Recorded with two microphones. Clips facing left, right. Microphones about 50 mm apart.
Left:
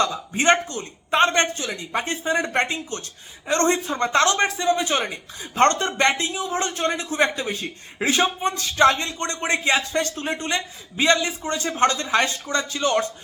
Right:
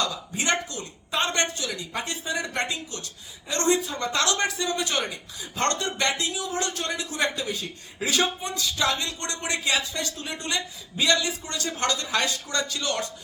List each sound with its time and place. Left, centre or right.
0.0 s speech: left